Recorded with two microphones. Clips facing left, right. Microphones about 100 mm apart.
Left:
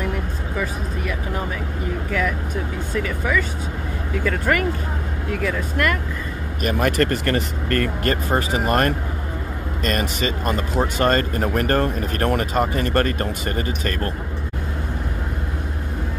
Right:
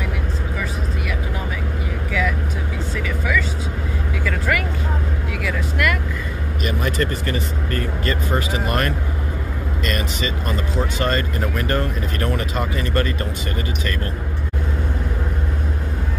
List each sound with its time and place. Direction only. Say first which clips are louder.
4.2 s vehicle: left 3 dB; 40° left (ahead or behind)
6.6 s speech: left 3 dB; 55° left (ahead or behind)